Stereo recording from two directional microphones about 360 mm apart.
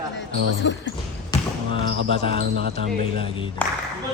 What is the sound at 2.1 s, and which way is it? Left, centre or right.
Jingle bell, centre.